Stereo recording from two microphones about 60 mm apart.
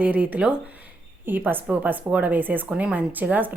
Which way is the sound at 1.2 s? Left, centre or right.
Right.